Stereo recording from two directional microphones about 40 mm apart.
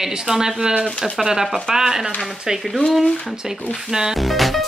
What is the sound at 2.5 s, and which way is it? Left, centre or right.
Speech, centre.